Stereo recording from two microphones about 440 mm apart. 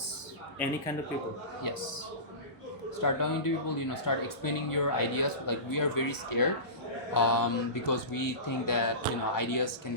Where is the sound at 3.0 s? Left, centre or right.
Left.